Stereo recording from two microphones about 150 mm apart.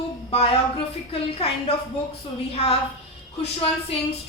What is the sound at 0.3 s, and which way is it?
A woman's voice, 40° left (ahead or behind).